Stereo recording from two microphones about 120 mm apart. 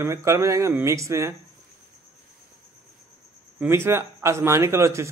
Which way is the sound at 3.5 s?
20° right (ahead or behind).